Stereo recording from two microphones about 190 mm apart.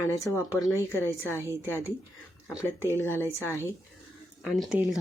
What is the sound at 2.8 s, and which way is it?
Speech, 10° left (ahead or behind).